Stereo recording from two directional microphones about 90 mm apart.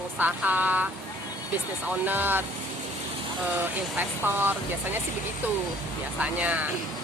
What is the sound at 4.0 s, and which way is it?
Speech, 25° right (ahead or behind).